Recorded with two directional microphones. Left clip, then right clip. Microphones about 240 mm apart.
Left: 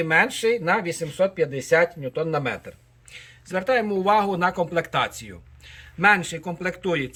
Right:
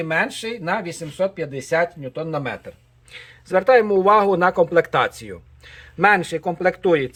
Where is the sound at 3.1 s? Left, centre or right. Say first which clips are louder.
Right 8 dB; centre.